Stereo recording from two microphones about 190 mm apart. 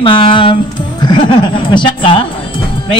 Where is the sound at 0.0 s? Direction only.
25° left (ahead or behind).